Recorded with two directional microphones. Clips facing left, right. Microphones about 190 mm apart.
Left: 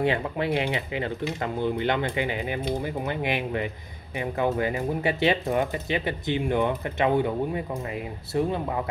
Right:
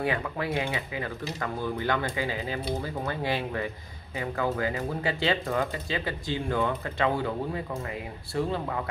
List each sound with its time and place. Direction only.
0.0 s speech: 25° left (ahead or behind)